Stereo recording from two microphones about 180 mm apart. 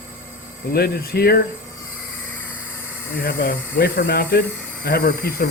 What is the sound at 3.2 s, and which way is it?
Speech, 55° left (ahead or behind).